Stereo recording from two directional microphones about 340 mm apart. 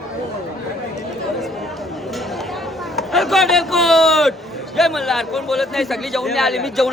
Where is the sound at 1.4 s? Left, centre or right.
Centre.